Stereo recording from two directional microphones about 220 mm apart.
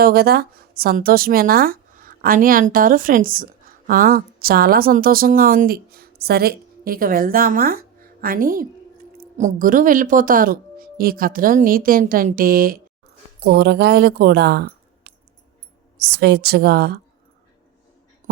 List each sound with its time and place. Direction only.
0.0 s a woman's voice: 45° right (ahead or behind)